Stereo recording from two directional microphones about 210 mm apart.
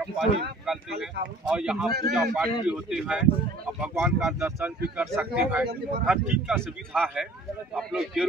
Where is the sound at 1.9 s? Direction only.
50° right (ahead or behind).